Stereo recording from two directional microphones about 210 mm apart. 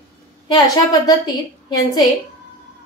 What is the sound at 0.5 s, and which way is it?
Speech, 15° left (ahead or behind).